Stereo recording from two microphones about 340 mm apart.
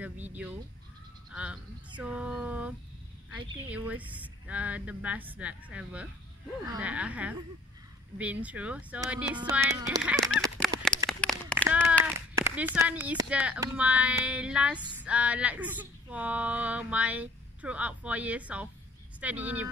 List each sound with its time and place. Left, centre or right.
0.0 s speech: centre
10.2 s honk: centre
11.1 s speech: centre